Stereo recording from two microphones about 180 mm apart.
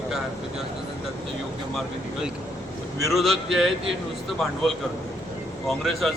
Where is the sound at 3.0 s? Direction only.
Centre (ahead or behind).